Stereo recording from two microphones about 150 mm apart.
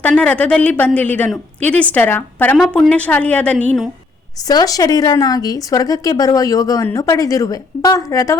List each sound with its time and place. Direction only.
0.0 s a woman's voice: 10° left (ahead or behind)
4.4 s speech: 25° left (ahead or behind)